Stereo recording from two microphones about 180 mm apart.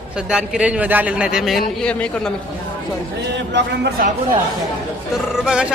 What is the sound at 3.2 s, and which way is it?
Speech, 75° right (ahead or behind).